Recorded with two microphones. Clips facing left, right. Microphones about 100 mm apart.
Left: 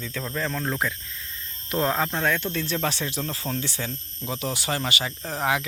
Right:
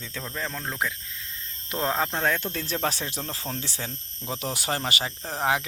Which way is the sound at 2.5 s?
40° right (ahead or behind).